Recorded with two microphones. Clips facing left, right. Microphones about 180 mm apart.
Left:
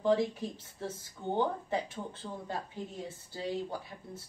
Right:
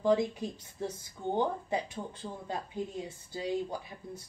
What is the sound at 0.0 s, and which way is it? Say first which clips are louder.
Speech: right 1 dB; 20° right (ahead or behind).